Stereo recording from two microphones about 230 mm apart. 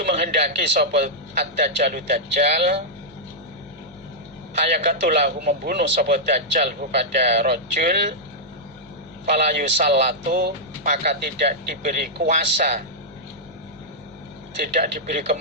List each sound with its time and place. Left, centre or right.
0.0 s a sound: right
0.4 s a man's voice: right
4.8 s a man's voice: right
9.2 s a man's voice: right
14.6 s a man's voice: right